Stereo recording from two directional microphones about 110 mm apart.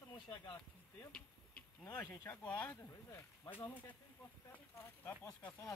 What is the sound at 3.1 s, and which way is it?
Speech, 25° left (ahead or behind).